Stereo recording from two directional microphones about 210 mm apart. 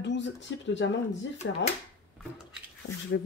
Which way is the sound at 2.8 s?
55° left (ahead or behind).